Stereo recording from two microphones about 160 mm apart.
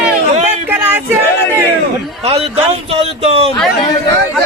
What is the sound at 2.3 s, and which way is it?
Speech, 40° right (ahead or behind).